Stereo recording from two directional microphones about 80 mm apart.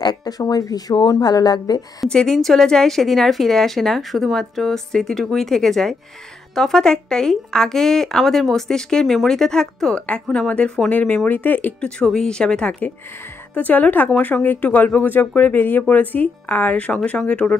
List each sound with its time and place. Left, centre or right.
0.0 s speech: left
2.0 s a woman's voice: centre
12.0 s speech: centre